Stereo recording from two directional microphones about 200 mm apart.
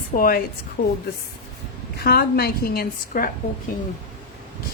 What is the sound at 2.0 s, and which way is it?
A woman's voice, 50° left (ahead or behind).